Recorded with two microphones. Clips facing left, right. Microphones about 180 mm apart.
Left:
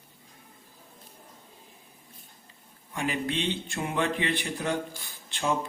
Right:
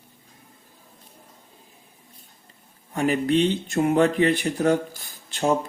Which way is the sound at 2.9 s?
45° right (ahead or behind).